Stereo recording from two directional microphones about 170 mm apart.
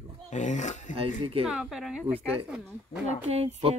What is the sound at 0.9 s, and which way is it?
Speech, 35° right (ahead or behind).